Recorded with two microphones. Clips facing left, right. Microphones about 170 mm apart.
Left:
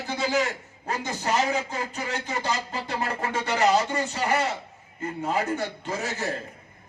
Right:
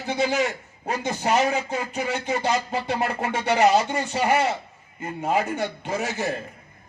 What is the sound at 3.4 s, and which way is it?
Speech, 65° right (ahead or behind).